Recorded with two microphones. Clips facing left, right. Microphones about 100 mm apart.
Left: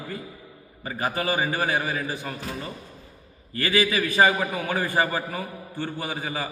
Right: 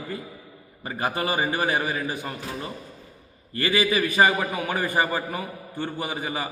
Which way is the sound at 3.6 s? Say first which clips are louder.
Right 1 dB; 15° right (ahead or behind).